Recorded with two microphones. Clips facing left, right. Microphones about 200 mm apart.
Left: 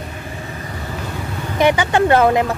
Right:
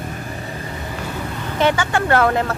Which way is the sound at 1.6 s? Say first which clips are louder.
Left 4 dB; 15° left (ahead or behind).